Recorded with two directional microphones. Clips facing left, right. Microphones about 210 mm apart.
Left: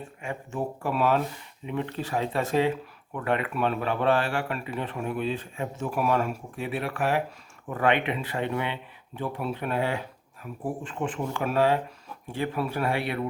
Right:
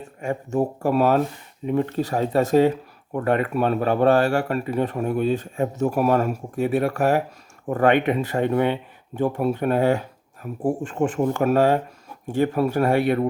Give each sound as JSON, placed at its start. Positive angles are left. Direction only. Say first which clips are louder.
{"t": 0.0, "sound": "speech", "louder": "right 8 dB", "side_deg": -40}